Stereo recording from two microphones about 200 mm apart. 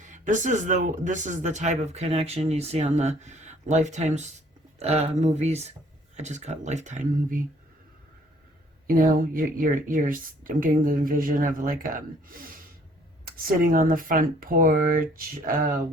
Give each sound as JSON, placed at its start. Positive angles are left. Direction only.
{"t": 0.0, "sound": "speech", "side_deg": -40}
{"t": 8.9, "sound": "speech", "side_deg": -45}